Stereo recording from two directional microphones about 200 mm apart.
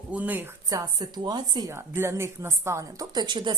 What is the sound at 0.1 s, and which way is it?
A woman's voice, 10° right (ahead or behind).